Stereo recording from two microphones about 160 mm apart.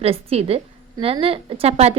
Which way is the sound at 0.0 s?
40° right (ahead or behind).